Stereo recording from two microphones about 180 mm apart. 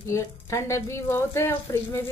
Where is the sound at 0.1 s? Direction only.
15° left (ahead or behind).